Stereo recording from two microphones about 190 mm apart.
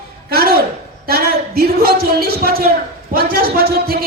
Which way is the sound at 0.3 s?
55° right (ahead or behind).